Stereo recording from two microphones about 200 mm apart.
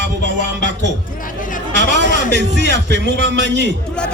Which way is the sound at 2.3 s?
60° right (ahead or behind).